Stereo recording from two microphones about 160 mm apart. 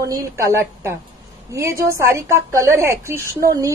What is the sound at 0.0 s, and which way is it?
A woman's voice, 20° right (ahead or behind).